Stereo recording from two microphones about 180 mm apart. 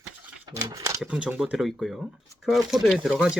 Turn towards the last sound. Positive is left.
turn(degrees=0)  # may be behind; listen again after turning